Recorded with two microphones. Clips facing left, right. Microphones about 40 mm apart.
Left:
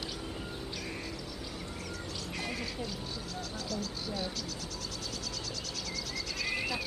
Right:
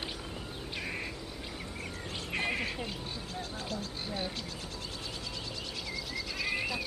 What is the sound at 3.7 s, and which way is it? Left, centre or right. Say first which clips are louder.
Speech: left 3 dB; right.